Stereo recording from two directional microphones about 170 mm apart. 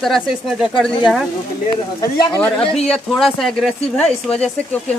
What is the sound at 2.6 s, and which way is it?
Speech, 35° left (ahead or behind).